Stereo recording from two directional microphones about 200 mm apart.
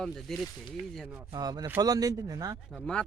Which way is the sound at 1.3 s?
20° right (ahead or behind).